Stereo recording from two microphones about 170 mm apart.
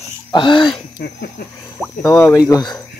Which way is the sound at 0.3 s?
30° left (ahead or behind).